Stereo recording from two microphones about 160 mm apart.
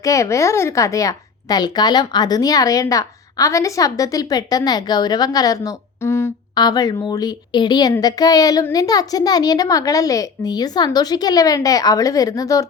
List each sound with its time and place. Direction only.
0.0 s speech: 20° left (ahead or behind)